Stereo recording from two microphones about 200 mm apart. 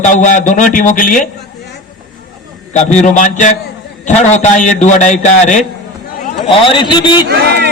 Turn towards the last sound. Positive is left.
turn(degrees=-55)  # may be behind; listen again after turning